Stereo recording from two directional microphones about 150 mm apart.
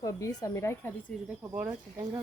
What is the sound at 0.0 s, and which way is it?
Speech, 25° left (ahead or behind).